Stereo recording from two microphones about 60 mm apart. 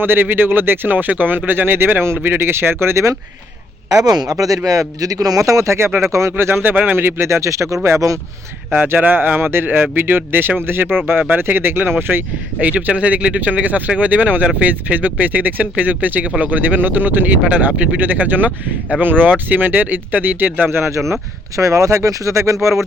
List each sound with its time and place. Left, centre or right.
0.0 s speech: right
4.0 s a man's voice: right
5.4 s speech: right
6.3 s speech: right
6.9 s speech: right
8.9 s speech: right
12.5 s speech: right
20.7 s speech: right